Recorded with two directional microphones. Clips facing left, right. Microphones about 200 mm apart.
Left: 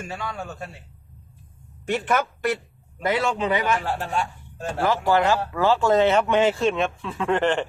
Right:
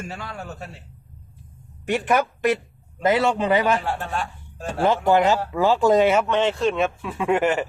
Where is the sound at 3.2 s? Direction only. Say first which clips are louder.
Right 4 dB; 30° right (ahead or behind).